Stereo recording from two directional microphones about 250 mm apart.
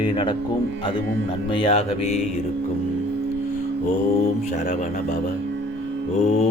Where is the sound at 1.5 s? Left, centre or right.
Left.